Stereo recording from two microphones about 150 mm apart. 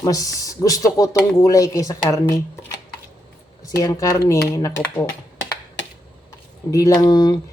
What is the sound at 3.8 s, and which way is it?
Speech, 20° left (ahead or behind).